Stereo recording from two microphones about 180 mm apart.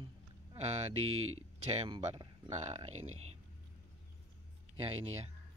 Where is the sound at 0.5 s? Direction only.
35° right (ahead or behind).